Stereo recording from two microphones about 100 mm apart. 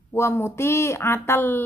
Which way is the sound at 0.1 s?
25° left (ahead or behind).